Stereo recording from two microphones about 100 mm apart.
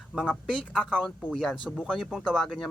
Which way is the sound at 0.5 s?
5° left (ahead or behind).